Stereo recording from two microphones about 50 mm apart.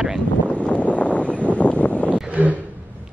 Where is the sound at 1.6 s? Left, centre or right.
Left.